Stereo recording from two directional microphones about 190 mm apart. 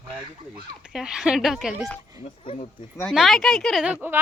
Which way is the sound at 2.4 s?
25° left (ahead or behind).